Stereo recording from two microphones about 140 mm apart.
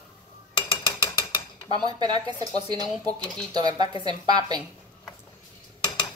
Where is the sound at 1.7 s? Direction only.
30° right (ahead or behind).